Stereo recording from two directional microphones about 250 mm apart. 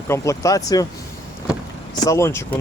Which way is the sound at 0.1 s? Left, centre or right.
Centre.